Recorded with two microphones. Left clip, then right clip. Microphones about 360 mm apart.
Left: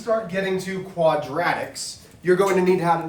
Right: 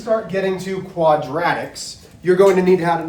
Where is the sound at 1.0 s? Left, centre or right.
Centre.